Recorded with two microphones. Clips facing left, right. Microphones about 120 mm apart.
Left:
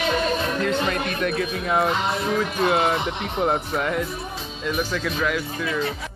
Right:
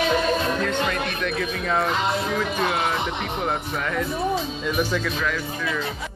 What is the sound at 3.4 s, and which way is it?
Speech, 20° left (ahead or behind).